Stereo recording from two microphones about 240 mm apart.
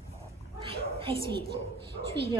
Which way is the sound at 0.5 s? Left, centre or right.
Right.